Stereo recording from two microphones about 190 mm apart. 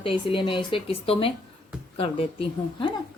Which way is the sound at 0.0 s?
25° left (ahead or behind).